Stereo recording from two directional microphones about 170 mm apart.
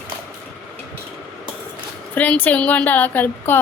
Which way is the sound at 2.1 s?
10° left (ahead or behind).